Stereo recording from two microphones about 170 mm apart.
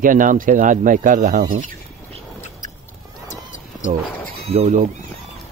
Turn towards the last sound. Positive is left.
turn(degrees=-40)  # may be behind; listen again after turning